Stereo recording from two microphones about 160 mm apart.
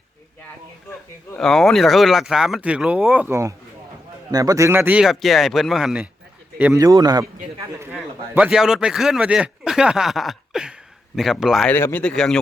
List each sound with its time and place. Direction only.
1.4 s a man's voice: centre (ahead or behind)
6.7 s a man's voice: 25° right (ahead or behind)
7.9 s a man's voice: 10° right (ahead or behind)
11.7 s speech: 15° left (ahead or behind)